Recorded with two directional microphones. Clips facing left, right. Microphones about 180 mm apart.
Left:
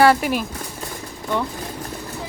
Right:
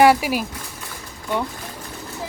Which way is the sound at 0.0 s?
10° right (ahead or behind).